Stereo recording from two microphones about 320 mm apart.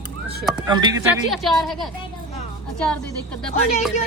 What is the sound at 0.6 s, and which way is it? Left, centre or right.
A woman's voice, centre.